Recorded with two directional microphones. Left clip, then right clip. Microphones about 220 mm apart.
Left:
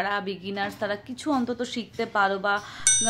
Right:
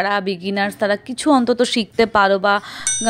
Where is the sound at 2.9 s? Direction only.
Centre (ahead or behind).